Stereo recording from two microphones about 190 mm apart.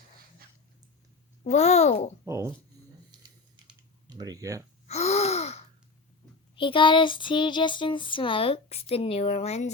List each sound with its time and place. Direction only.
1.5 s a child's voice: 35° left (ahead or behind)
2.2 s speech: 15° right (ahead or behind)
4.0 s speech: 20° right (ahead or behind)
4.9 s gasp: 35° left (ahead or behind)
6.6 s child singing: 25° left (ahead or behind)